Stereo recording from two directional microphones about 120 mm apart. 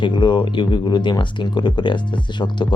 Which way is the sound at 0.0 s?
40° left (ahead or behind).